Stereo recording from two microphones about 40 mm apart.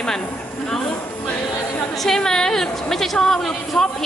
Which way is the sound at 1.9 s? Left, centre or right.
Centre.